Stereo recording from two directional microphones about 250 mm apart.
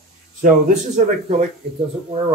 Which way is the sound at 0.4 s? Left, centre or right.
Right.